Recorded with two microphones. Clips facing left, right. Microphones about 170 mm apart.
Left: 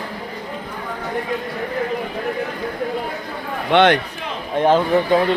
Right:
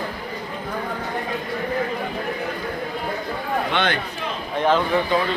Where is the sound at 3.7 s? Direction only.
75° left (ahead or behind).